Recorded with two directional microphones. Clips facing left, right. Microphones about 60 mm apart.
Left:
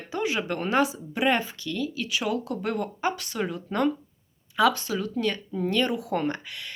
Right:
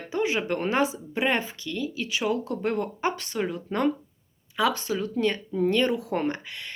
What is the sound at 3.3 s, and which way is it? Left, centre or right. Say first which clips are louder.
Speech: even; centre.